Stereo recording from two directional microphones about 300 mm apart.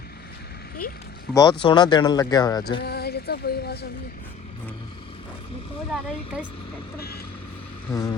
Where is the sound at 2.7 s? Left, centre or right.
Left.